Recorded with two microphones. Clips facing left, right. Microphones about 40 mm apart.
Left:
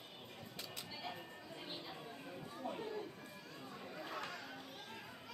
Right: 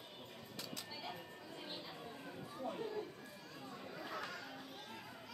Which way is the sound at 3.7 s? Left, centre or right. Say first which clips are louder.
Even; centre.